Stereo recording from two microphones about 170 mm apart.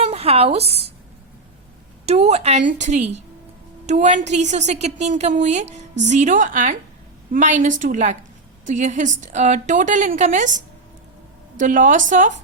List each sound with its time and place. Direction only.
0.0 s speech: 35° right (ahead or behind)
2.0 s a woman's voice: 40° right (ahead or behind)
11.6 s a woman's voice: 50° right (ahead or behind)